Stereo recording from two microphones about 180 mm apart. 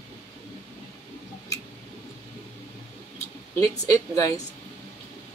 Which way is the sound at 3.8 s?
20° left (ahead or behind).